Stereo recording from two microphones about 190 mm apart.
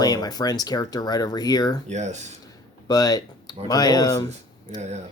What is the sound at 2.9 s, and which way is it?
Speech, 20° left (ahead or behind).